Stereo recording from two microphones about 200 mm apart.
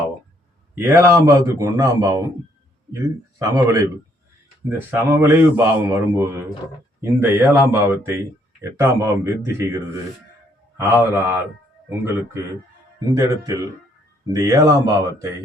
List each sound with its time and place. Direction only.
0.8 s speech: 10° right (ahead or behind)
3.3 s speech: 15° right (ahead or behind)
4.9 s speech: 10° right (ahead or behind)